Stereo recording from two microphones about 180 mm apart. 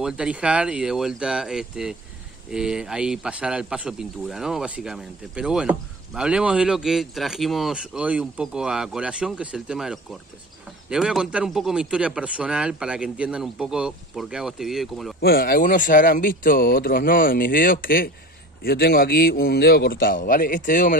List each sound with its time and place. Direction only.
0.0 s speech: 5° right (ahead or behind)
15.1 s a man's voice: 60° left (ahead or behind)